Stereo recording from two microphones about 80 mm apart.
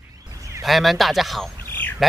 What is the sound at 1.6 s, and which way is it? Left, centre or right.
Bird, left.